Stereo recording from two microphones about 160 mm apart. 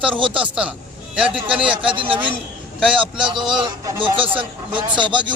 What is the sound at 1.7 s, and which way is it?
Speech, 30° right (ahead or behind).